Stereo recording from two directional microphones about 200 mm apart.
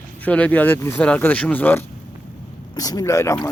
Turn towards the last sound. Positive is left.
turn(degrees=15)  # may be behind; listen again after turning